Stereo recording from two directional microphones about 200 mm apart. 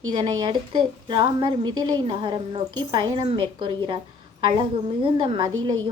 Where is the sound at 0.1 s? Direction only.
20° right (ahead or behind).